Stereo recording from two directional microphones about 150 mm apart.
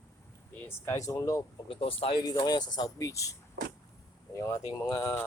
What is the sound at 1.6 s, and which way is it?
Speech, 35° left (ahead or behind).